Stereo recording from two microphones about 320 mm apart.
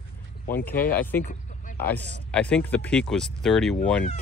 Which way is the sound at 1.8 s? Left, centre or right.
Centre.